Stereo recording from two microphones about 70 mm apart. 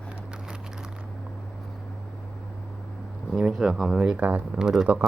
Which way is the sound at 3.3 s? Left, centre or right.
Centre.